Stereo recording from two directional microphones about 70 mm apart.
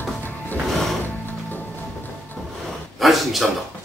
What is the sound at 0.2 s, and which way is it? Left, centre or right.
Music, left.